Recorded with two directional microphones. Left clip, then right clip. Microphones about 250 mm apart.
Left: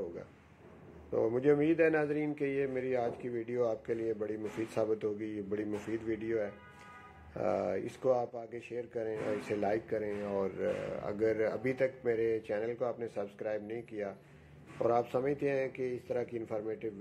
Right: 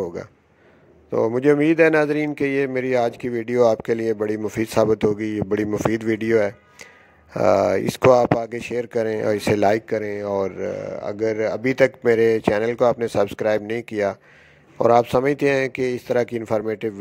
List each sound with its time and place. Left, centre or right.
1.1 s speech: right